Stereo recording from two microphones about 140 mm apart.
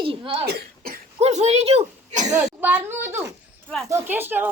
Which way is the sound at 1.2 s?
50° right (ahead or behind).